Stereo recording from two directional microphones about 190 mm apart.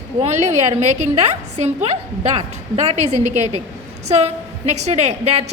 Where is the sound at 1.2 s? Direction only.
35° right (ahead or behind).